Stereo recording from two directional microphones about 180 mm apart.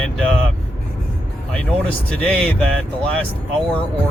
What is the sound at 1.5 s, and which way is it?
Speech, 5° left (ahead or behind).